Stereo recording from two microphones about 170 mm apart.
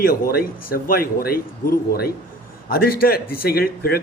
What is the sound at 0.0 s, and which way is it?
A man's voice, 60° left (ahead or behind).